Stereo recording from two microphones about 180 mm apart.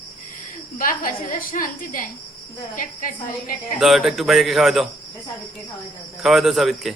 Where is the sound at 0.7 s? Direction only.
50° left (ahead or behind).